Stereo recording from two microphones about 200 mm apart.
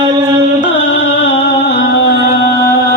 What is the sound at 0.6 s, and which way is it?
Music, 60° left (ahead or behind).